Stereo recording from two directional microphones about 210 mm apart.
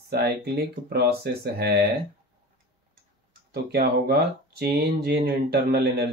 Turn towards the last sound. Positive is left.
turn(degrees=-50)  # may be behind; listen again after turning